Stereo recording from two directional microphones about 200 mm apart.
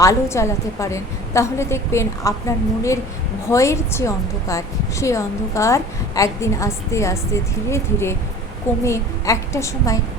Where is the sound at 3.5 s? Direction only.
15° left (ahead or behind).